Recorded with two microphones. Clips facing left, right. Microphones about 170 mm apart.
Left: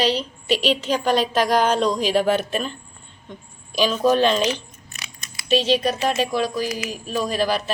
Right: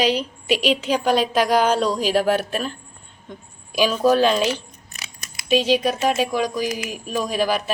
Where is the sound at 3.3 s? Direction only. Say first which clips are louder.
Right 1 dB; 10° right (ahead or behind).